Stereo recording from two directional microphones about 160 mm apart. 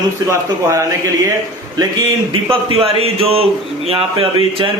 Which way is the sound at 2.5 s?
35° right (ahead or behind).